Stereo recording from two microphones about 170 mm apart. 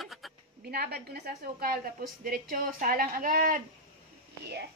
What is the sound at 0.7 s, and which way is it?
Speech, 70° right (ahead or behind).